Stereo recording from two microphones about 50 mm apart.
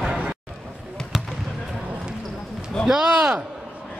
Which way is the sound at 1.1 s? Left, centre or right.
Centre.